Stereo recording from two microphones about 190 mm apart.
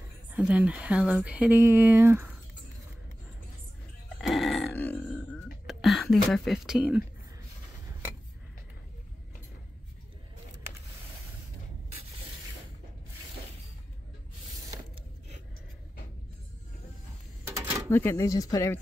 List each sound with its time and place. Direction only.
0.3 s speech: 5° right (ahead or behind)
4.2 s grunt: centre (ahead or behind)
17.5 s a sound: 15° right (ahead or behind)
17.8 s speech: 15° left (ahead or behind)